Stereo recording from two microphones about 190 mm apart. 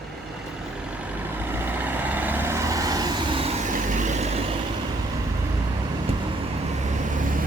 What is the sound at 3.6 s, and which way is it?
Vehicle, 40° right (ahead or behind).